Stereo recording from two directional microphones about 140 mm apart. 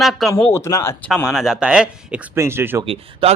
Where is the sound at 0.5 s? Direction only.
20° left (ahead or behind).